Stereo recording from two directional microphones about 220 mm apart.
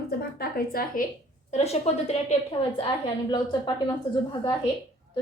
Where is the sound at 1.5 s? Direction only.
30° left (ahead or behind).